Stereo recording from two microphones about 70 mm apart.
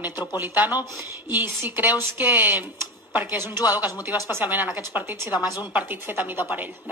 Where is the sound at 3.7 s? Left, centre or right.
Right.